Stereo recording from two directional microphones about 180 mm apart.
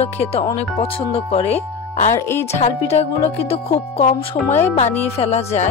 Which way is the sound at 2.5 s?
35° left (ahead or behind).